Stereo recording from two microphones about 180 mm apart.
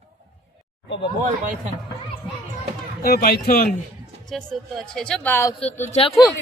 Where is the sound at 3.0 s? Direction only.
60° left (ahead or behind).